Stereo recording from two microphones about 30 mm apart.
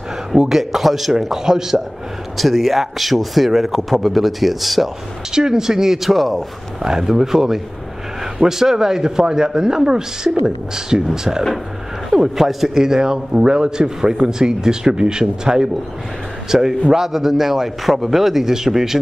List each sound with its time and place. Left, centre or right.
0.5 s speech: centre
2.3 s a man's voice: centre
5.3 s speech: centre
6.8 s a man's voice: right
12.4 s speech: centre
12.7 s a man's voice: centre
16.4 s speech: centre